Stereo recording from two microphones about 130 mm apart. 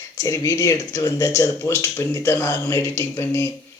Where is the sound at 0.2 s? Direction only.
25° left (ahead or behind).